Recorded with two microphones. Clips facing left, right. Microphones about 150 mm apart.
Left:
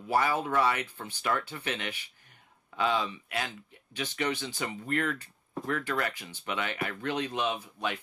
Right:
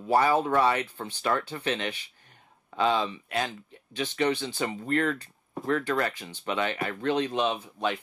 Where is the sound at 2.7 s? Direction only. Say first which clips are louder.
Right 4 dB; 35° right (ahead or behind).